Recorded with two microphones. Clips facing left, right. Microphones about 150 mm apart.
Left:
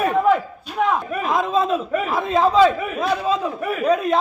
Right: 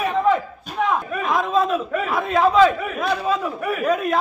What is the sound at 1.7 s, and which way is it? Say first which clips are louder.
A man's voice: left 1 dB; 30° left (ahead or behind).